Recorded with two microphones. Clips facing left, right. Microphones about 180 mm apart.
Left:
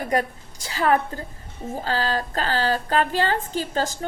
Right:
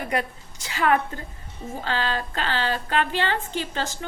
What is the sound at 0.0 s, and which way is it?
A woman's voice, 40° left (ahead or behind).